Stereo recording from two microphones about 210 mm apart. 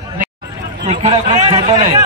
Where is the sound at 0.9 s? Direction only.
30° right (ahead or behind).